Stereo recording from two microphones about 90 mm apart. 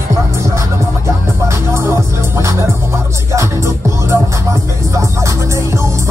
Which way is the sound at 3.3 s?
35° right (ahead or behind).